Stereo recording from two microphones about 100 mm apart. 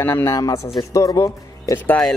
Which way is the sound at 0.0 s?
25° left (ahead or behind).